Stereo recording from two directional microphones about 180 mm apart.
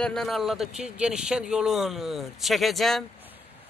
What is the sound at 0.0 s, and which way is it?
Speech, centre (ahead or behind).